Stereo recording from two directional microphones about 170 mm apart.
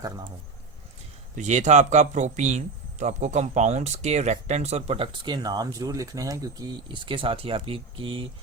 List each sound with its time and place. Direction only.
1.4 s speech: 45° right (ahead or behind)